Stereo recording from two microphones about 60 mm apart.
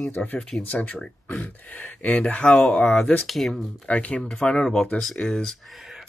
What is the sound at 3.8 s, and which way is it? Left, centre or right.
Speech, left.